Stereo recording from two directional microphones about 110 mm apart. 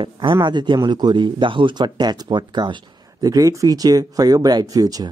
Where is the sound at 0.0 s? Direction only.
50° right (ahead or behind).